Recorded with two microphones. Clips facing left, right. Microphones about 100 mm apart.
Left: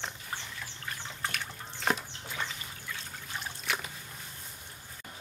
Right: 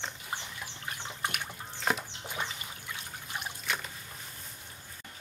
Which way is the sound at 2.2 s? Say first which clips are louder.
Right 1 dB; 20° right (ahead or behind).